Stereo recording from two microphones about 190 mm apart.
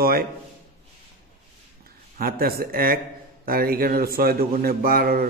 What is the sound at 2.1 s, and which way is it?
A man's voice, 50° right (ahead or behind).